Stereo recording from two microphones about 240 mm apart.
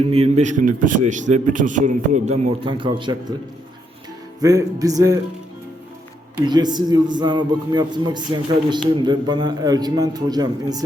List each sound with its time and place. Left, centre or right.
0.1 s a man's voice: right
4.4 s a man's voice: centre
6.4 s a man's voice: centre